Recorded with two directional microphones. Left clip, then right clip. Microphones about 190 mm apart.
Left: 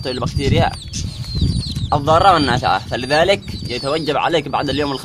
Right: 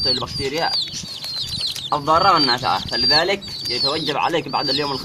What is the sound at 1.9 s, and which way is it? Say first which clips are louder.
Speech: left 3 dB; 45° left (ahead or behind).